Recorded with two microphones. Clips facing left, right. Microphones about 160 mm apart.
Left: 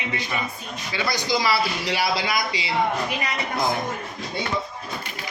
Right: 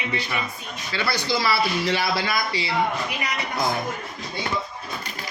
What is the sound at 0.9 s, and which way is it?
Speech, 15° left (ahead or behind).